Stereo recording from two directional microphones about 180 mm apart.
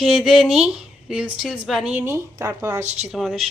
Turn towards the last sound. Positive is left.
turn(degrees=0)  # may be behind; listen again after turning